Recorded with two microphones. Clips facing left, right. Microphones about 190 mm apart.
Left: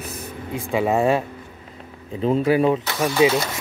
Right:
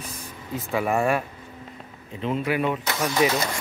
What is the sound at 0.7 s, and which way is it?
Speech, 20° left (ahead or behind).